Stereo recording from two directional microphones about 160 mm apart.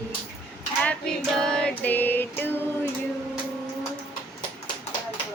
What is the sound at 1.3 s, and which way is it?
Music, 5° left (ahead or behind).